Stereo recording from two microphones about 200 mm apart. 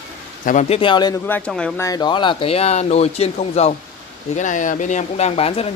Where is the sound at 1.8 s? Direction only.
20° left (ahead or behind).